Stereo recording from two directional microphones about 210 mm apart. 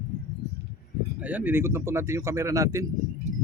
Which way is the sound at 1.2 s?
10° right (ahead or behind).